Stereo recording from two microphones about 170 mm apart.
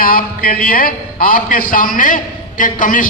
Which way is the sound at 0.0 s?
55° left (ahead or behind).